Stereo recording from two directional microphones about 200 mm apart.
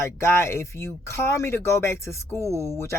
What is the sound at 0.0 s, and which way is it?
Speech, 15° left (ahead or behind).